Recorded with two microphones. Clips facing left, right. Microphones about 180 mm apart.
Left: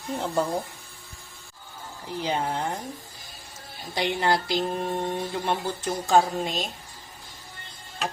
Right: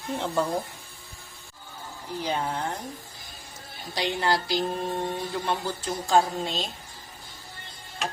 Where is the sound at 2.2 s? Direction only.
20° left (ahead or behind).